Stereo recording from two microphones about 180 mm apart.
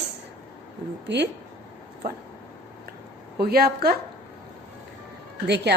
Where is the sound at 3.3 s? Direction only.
60° right (ahead or behind).